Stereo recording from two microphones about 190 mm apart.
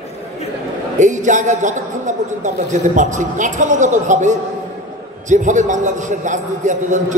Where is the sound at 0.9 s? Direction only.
40° right (ahead or behind).